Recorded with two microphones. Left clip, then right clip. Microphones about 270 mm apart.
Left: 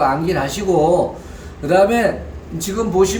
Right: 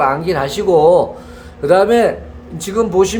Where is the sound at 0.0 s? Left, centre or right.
Centre.